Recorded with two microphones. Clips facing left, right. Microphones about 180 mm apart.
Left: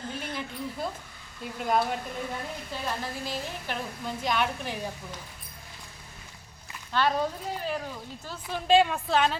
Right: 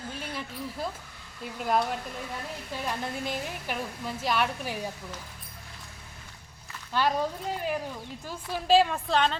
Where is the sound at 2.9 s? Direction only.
15° right (ahead or behind).